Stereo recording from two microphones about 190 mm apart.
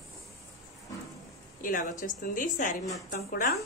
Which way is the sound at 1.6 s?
45° left (ahead or behind).